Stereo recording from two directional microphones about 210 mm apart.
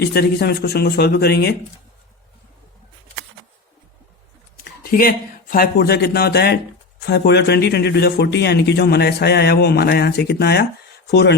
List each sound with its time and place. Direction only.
0.0 s speech: 50° left (ahead or behind)
4.6 s speech: 45° left (ahead or behind)